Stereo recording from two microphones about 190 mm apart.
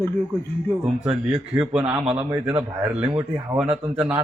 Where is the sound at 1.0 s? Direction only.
5° right (ahead or behind).